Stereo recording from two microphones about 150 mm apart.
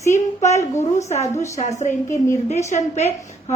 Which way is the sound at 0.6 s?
50° left (ahead or behind).